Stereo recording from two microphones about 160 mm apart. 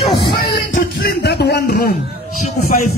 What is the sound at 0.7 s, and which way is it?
Speech, 70° left (ahead or behind).